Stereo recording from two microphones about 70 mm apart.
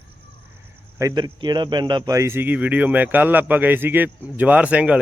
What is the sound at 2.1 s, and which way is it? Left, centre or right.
Speech, right.